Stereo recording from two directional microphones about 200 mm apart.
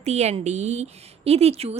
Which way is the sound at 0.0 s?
35° right (ahead or behind).